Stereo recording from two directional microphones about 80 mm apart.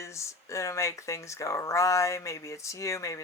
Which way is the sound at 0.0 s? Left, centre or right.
Left.